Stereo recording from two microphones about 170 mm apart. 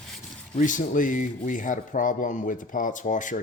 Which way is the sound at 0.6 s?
50° left (ahead or behind).